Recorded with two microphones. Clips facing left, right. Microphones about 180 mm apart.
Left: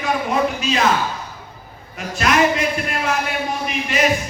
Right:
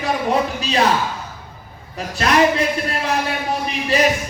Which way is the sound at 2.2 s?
35° right (ahead or behind).